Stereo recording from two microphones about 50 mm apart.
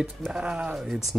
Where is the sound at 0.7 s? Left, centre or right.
Centre.